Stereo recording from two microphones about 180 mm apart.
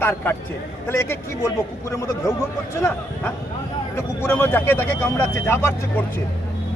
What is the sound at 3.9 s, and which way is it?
Speech, 15° left (ahead or behind).